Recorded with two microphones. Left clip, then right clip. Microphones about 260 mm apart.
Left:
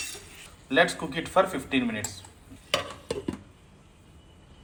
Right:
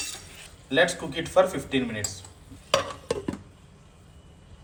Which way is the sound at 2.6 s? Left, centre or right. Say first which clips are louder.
Right 4 dB; centre.